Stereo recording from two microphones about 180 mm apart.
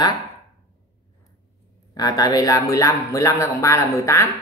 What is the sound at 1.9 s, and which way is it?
Speech, 20° left (ahead or behind).